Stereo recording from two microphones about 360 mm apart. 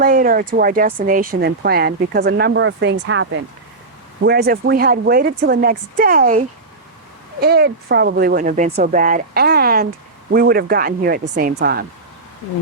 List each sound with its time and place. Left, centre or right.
0.0 s speech: right
7.4 s speech: right